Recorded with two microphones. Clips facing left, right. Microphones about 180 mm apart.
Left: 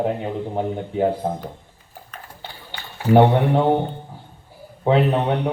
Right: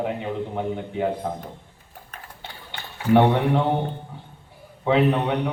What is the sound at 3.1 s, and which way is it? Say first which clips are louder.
Speech: left 3 dB; 35° left (ahead or behind).